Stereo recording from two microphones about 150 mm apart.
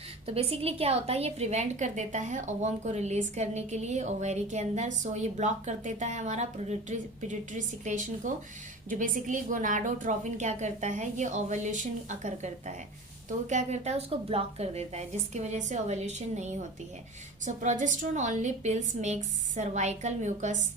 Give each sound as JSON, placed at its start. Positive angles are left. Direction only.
{"t": 0.3, "sound": "a woman's voice", "side_deg": -40}